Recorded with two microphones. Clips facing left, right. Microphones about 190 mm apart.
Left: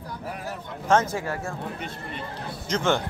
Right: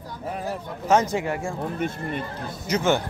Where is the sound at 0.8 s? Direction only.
15° right (ahead or behind).